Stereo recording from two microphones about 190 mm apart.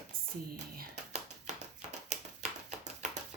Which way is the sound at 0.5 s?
40° right (ahead or behind).